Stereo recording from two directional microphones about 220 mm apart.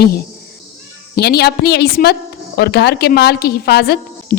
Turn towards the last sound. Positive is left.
turn(degrees=45)  # may be behind; listen again after turning